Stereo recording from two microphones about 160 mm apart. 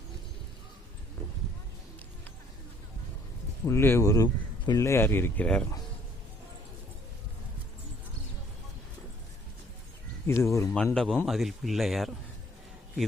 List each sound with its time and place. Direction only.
3.7 s speech: 15° left (ahead or behind)
10.2 s speech: 15° left (ahead or behind)
10.9 s a man's voice: 5° left (ahead or behind)